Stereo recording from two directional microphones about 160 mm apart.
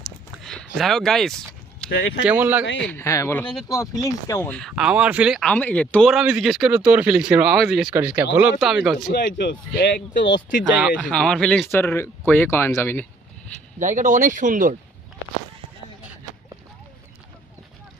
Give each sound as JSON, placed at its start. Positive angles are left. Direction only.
{"t": 0.0, "sound": "a sound", "side_deg": 5}
{"t": 2.2, "sound": "speech", "side_deg": -10}
{"t": 2.9, "sound": "speech", "side_deg": 20}
{"t": 3.4, "sound": "speech", "side_deg": 0}
{"t": 4.0, "sound": "speech", "side_deg": 20}
{"t": 4.7, "sound": "speech", "side_deg": -5}
{"t": 5.5, "sound": "speech", "side_deg": 10}
{"t": 6.1, "sound": "speech", "side_deg": 0}
{"t": 9.1, "sound": "speech", "side_deg": 75}
{"t": 10.8, "sound": "speech", "side_deg": -5}
{"t": 11.7, "sound": "speech", "side_deg": 15}
{"t": 13.7, "sound": "speech", "side_deg": -50}